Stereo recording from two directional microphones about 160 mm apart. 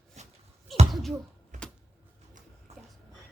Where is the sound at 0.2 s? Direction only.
45° right (ahead or behind).